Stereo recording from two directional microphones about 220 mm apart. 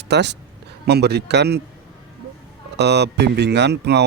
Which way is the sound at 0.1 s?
50° right (ahead or behind).